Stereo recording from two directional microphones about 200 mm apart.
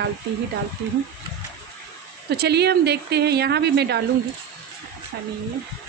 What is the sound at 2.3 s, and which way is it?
Speech, 55° right (ahead or behind).